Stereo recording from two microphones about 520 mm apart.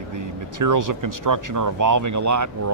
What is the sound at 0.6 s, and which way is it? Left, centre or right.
Speech, right.